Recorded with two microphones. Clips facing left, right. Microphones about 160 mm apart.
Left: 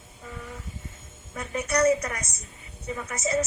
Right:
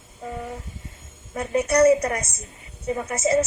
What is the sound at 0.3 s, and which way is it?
Vehicle, 40° right (ahead or behind).